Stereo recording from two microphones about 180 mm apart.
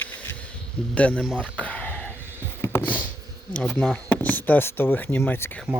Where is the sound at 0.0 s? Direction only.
10° left (ahead or behind).